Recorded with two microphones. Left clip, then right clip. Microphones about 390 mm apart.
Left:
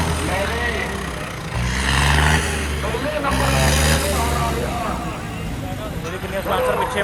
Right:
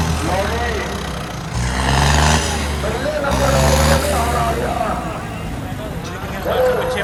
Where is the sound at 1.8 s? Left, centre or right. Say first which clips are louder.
Right 2 dB; right.